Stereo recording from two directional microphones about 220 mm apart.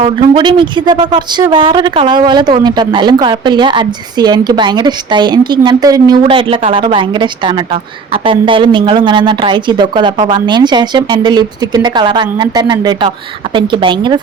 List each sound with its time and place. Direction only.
0.0 s speech: 25° right (ahead or behind)